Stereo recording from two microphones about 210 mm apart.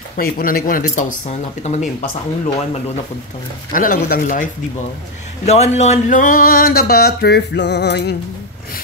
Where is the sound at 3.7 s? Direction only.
40° left (ahead or behind).